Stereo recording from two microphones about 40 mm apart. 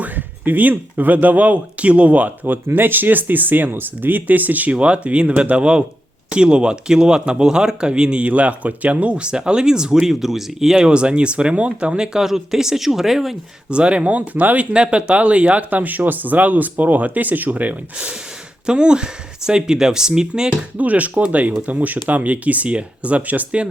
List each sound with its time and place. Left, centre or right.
0.0 s speech: right
4.7 s speech: right
8.2 s speech: right; by 10.0 s centre
10.0 s speech: centre
10.8 s speech: right
12.1 s speech: centre
13.7 s speech: right
15.7 s speech: right
18.6 s speech: right
20.7 s speech: right